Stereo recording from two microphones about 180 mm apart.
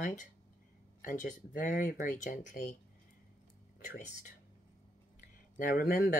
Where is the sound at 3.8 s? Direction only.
45° left (ahead or behind).